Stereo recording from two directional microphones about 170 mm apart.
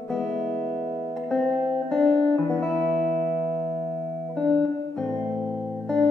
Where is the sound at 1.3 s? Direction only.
5° left (ahead or behind).